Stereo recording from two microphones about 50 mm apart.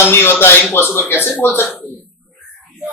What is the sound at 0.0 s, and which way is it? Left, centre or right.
Speech, left.